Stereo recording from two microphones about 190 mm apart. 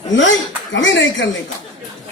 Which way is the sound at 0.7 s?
75° left (ahead or behind).